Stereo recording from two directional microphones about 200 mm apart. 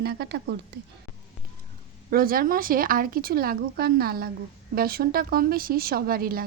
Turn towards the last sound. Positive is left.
turn(degrees=-50)  # may be behind; listen again after turning